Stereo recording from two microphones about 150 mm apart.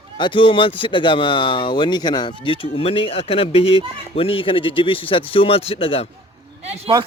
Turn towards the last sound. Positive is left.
turn(degrees=-45)  # may be behind; listen again after turning